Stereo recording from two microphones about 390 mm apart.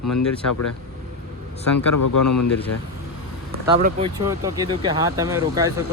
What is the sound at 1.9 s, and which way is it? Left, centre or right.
Speech, left.